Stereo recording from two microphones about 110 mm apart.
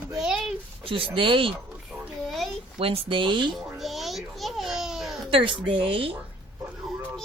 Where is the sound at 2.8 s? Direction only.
55° right (ahead or behind).